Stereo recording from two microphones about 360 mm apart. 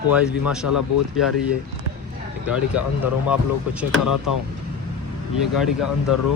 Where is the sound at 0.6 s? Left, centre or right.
Left.